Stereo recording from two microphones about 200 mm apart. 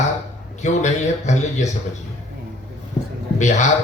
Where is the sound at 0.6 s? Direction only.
35° left (ahead or behind).